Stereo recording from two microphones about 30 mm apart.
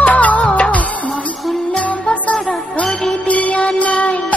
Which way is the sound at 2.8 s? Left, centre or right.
Left.